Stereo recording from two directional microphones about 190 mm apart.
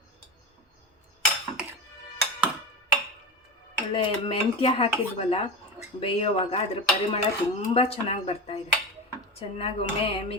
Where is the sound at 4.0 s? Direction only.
25° left (ahead or behind).